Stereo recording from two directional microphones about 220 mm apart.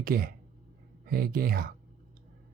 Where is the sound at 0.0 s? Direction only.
40° right (ahead or behind).